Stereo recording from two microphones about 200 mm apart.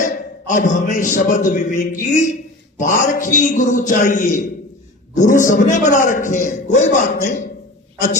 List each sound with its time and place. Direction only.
0.0 s a man's voice: 40° left (ahead or behind)